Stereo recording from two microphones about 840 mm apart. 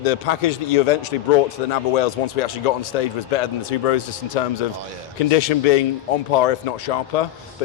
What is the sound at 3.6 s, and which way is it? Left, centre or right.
A man's voice, left.